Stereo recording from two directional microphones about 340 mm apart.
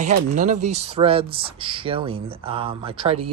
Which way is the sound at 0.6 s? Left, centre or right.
Right.